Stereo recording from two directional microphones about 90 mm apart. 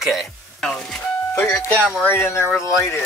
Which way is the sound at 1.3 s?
25° left (ahead or behind).